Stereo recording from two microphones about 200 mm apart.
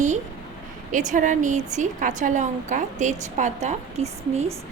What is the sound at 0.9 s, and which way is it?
A woman's voice, 40° right (ahead or behind).